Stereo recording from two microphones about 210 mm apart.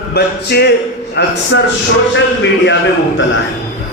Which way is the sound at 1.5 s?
65° left (ahead or behind).